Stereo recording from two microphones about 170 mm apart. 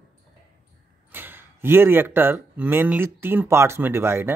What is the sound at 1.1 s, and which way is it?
Speech, 10° right (ahead or behind).